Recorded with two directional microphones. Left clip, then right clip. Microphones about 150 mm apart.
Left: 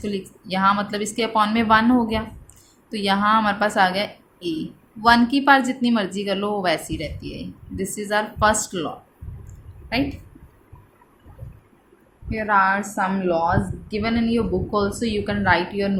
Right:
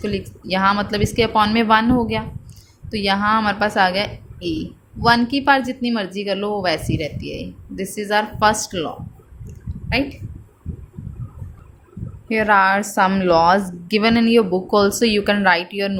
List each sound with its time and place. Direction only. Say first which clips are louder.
0.0 s a woman's voice: right 4 dB; 25° right (ahead or behind)
12.3 s a woman's voice: right 4 dB; 40° right (ahead or behind)
13.1 s speech: right 7 dB; 60° right (ahead or behind)